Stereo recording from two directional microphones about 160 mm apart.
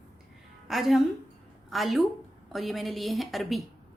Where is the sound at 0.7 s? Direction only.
Centre (ahead or behind).